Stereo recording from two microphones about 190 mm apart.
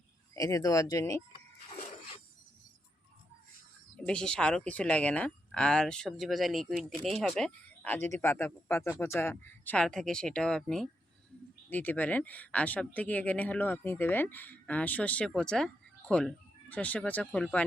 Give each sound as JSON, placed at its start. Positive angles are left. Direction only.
{"t": 0.3, "sound": "speech", "side_deg": 15}
{"t": 3.9, "sound": "a woman's voice", "side_deg": 5}